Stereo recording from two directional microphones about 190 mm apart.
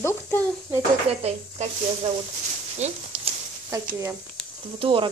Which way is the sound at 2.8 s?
35° right (ahead or behind).